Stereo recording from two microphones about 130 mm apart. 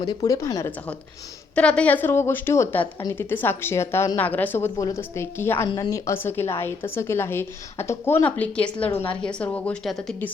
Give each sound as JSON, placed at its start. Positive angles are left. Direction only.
{"t": 0.0, "sound": "a woman's voice", "side_deg": 30}
{"t": 1.5, "sound": "a woman's voice", "side_deg": 10}
{"t": 5.6, "sound": "a woman's voice", "side_deg": 30}